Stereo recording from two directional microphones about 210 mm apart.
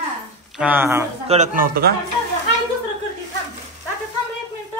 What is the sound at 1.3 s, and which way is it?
Speech, 40° right (ahead or behind).